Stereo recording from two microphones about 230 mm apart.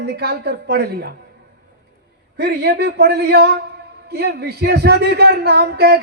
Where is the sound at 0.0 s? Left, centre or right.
Right.